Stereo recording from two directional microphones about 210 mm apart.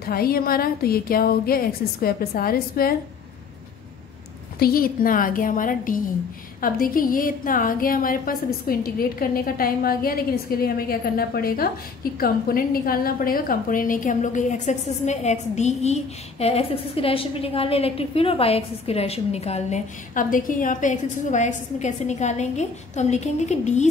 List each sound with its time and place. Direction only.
0.0 s a woman's voice: 45° left (ahead or behind)
4.6 s a woman's voice: 45° left (ahead or behind)